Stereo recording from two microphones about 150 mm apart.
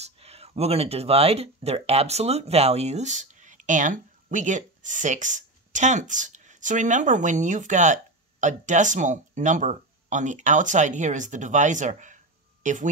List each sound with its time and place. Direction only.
0.0 s speech: 40° right (ahead or behind)